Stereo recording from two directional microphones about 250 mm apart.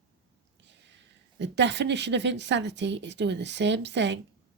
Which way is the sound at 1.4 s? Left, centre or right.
Right.